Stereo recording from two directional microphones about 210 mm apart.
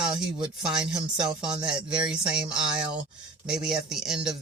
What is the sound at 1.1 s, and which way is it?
Speech, 20° right (ahead or behind).